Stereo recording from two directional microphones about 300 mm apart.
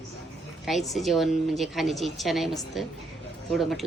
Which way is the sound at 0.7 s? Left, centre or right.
Centre.